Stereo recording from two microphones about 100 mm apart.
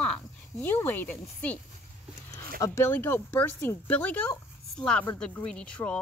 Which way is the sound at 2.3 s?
35° left (ahead or behind).